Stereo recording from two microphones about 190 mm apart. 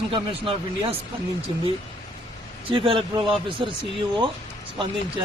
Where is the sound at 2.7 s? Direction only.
30° right (ahead or behind).